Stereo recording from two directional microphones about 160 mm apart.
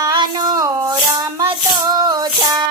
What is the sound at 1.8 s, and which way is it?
Music, 25° right (ahead or behind).